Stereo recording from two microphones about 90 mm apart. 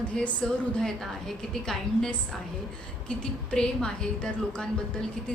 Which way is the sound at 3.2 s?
10° left (ahead or behind).